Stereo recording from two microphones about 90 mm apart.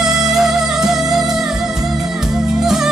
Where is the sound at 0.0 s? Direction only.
5° right (ahead or behind).